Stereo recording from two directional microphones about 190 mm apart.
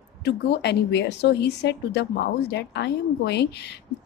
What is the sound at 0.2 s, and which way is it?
Speech, 60° left (ahead or behind).